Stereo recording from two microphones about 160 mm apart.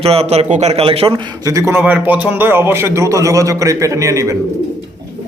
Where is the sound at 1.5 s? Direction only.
20° right (ahead or behind).